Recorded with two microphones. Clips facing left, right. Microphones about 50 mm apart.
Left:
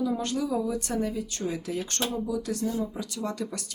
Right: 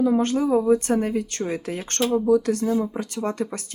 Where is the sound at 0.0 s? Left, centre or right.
Right.